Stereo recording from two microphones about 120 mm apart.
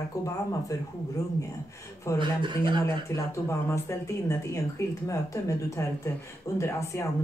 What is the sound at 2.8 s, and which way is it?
Speech, 20° left (ahead or behind).